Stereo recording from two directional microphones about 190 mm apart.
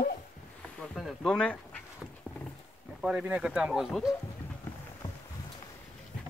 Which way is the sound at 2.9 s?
5° right (ahead or behind).